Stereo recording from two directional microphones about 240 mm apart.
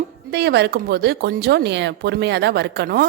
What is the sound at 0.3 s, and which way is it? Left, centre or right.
Speech, right.